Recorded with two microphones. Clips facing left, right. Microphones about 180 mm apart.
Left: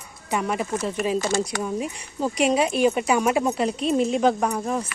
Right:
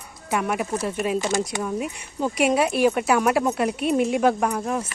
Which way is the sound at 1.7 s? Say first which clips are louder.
Even; 5° right (ahead or behind).